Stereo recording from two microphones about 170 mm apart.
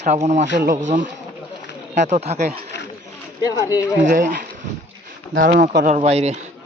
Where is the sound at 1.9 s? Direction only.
45° right (ahead or behind).